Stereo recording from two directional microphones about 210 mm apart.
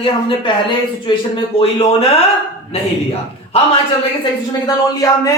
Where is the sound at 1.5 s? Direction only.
25° left (ahead or behind).